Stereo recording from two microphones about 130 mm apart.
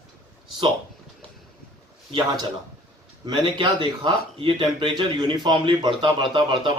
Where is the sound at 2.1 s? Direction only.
35° right (ahead or behind).